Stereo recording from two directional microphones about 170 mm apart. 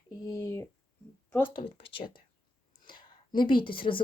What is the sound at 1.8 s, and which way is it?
A woman's voice, 30° left (ahead or behind).